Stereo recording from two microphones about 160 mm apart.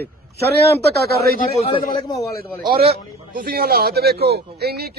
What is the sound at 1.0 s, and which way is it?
Speech, 80° right.